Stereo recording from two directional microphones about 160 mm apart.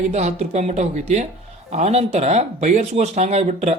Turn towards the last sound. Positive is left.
turn(degrees=-45)  # may be behind; listen again after turning